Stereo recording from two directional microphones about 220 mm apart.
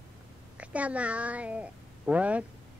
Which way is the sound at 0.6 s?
5° right (ahead or behind).